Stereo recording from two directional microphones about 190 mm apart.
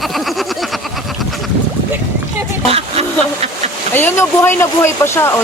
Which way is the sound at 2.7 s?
35° right (ahead or behind).